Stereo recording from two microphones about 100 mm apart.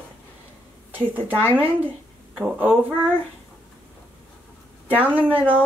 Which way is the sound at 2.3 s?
15° right (ahead or behind).